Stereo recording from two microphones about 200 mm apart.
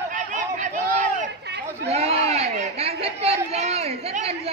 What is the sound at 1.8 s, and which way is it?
Chatter, 30° right (ahead or behind).